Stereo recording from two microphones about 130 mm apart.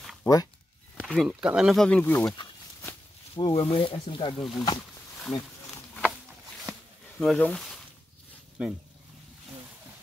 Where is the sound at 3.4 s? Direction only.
35° left (ahead or behind).